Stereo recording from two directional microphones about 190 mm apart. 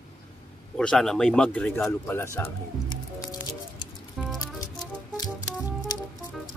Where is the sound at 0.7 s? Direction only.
5° left (ahead or behind).